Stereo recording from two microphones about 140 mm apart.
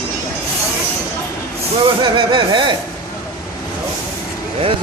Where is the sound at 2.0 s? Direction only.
35° right (ahead or behind).